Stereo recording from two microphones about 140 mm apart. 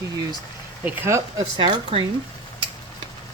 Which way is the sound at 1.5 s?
35° right (ahead or behind).